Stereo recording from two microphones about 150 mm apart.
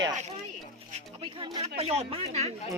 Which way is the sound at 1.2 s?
35° right (ahead or behind).